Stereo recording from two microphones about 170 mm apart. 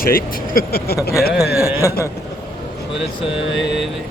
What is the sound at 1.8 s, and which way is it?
Speech, 15° left (ahead or behind).